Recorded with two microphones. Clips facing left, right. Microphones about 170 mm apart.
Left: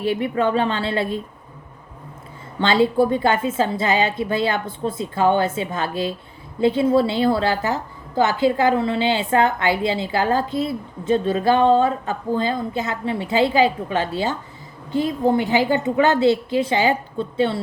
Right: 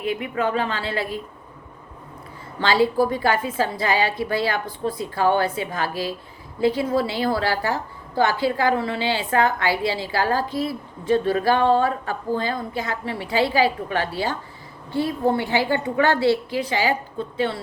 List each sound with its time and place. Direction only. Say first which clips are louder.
0.0 s a woman's voice: left 4 dB; 30° left (ahead or behind)
2.6 s a woman's voice: left 2 dB; 25° left (ahead or behind)